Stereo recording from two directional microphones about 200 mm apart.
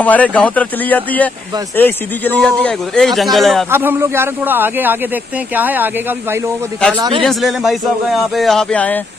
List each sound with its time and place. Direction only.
0.0 s a man's voice: 5° left (ahead or behind)
3.7 s a man's voice: 10° right (ahead or behind)
7.0 s a man's voice: 25° right (ahead or behind)
7.2 s a man's voice: centre (ahead or behind)